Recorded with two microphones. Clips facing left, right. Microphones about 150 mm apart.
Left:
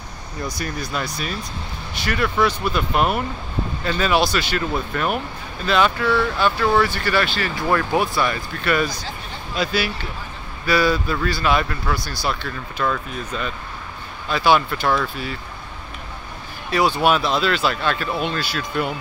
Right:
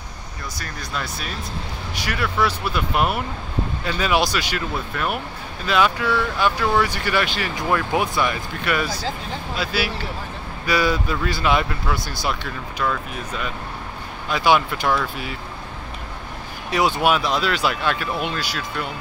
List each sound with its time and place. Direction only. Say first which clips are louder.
0.6 s speech: left 2 dB; 5° left (ahead or behind); by 4.6 s 10° right (ahead or behind)
4.9 s speech: left 2 dB; centre (ahead or behind)
10.7 s speech: left 2 dB; 15° right (ahead or behind)
14.3 s speech: left 1 dB; 15° right (ahead or behind)
16.7 s speech: left 1 dB; 15° right (ahead or behind)